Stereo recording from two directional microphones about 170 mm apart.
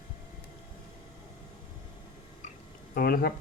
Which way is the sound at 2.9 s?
60° left (ahead or behind).